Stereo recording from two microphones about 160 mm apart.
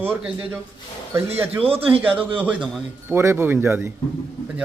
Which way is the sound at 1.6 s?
35° right (ahead or behind).